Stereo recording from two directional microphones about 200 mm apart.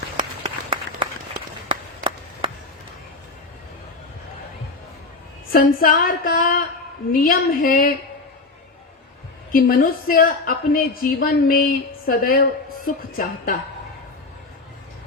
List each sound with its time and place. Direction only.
0.2 s applause: 25° right (ahead or behind)
5.5 s a woman's voice: 45° left (ahead or behind)
9.5 s a woman's voice: 45° left (ahead or behind)